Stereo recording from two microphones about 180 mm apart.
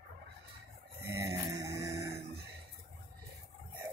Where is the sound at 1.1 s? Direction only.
15° right (ahead or behind).